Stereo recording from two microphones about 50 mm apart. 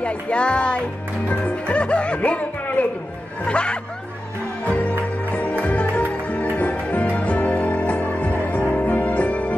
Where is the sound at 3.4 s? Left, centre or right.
Left.